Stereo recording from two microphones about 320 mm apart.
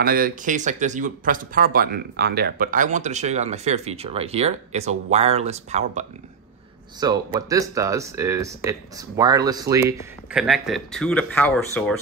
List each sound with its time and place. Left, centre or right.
0.0 s speech: right; by 11.9 s centre